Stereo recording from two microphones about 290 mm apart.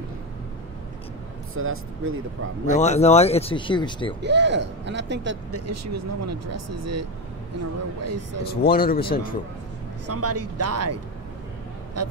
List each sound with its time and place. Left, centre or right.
1.5 s speech: right
2.7 s speech: left
4.2 s speech: right
5.7 s speech: right
8.6 s speech: left
10.0 s speech: right